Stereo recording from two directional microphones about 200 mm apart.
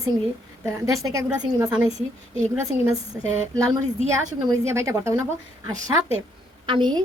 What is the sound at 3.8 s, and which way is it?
Speech, 35° right (ahead or behind).